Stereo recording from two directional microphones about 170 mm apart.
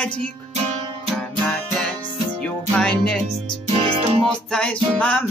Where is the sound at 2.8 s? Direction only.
5° left (ahead or behind).